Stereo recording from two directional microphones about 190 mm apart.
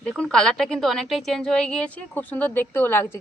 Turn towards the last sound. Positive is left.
turn(degrees=10)  # may be behind; listen again after turning